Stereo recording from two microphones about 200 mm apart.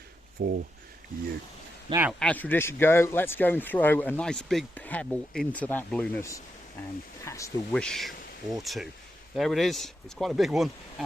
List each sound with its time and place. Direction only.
0.4 s speech: 50° right (ahead or behind)
1.9 s a man's voice: 10° right (ahead or behind)
2.1 s speech: 5° left (ahead or behind)
7.7 s speech: 5° left (ahead or behind)